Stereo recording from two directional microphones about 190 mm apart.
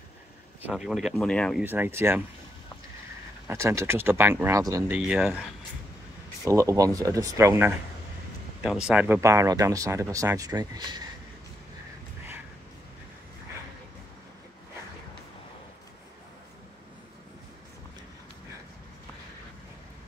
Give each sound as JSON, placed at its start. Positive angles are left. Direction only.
{"t": 0.6, "sound": "speech", "side_deg": -5}
{"t": 1.6, "sound": "speech", "side_deg": -10}
{"t": 3.4, "sound": "speech", "side_deg": -15}
{"t": 6.4, "sound": "speech", "side_deg": -15}